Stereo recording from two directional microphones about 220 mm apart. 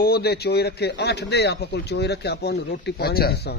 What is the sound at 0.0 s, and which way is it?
A man's voice, 45° left (ahead or behind).